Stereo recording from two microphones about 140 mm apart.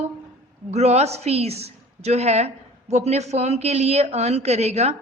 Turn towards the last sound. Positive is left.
turn(degrees=-50)  # may be behind; listen again after turning